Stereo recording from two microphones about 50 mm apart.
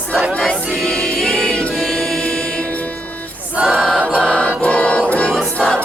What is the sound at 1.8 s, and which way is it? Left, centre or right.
Music, centre.